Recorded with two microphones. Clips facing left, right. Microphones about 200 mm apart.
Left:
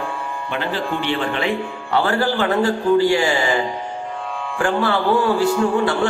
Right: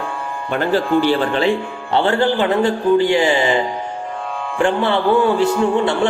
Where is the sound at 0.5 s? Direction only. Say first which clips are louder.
Right 8 dB; 45° right (ahead or behind).